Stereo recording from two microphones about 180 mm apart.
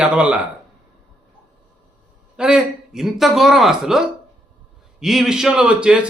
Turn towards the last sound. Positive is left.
turn(degrees=-5)  # may be behind; listen again after turning